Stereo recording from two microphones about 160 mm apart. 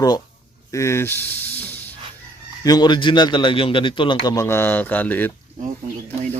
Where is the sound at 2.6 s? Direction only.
25° left (ahead or behind).